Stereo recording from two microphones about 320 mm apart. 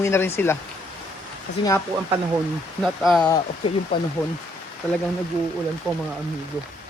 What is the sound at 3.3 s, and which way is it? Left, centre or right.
Speech, centre.